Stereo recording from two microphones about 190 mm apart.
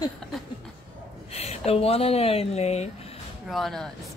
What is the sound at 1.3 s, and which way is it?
Speech, 35° left (ahead or behind).